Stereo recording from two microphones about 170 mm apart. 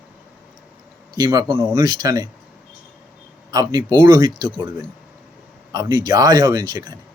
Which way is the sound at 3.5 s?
25° right (ahead or behind).